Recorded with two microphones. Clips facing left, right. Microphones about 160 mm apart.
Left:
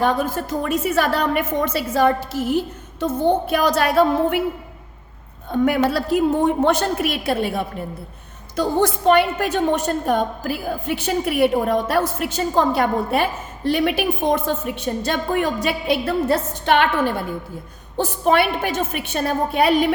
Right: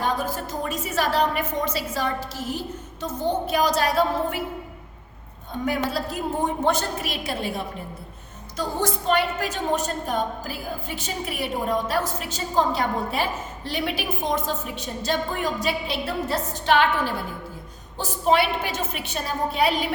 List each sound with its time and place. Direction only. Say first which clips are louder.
0.0 s a woman's voice: left 6 dB; 60° left (ahead or behind)
5.5 s a woman's voice: left 8 dB; 65° left (ahead or behind)
17.9 s a woman's voice: left 3 dB; 55° left (ahead or behind)